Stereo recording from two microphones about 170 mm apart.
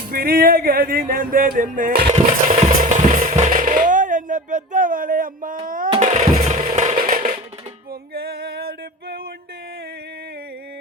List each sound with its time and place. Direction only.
0.1 s music: 60° right (ahead or behind)
2.0 s music: 40° right (ahead or behind)
5.6 s a child's voice: 55° right (ahead or behind)
6.0 s a sound: 45° right (ahead or behind)
6.7 s music: 50° right (ahead or behind)
8.1 s music: 65° right (ahead or behind)